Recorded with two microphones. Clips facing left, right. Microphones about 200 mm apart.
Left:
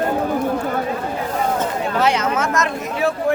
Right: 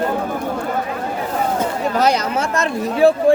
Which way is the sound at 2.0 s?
40° right (ahead or behind).